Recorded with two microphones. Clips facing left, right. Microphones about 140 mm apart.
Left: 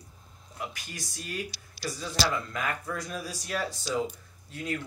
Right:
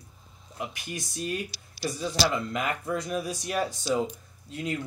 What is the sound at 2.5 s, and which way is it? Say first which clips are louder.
Speech: right 4 dB; 20° right (ahead or behind).